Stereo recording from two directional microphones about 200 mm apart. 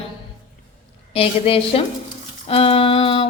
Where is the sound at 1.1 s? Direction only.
30° left (ahead or behind).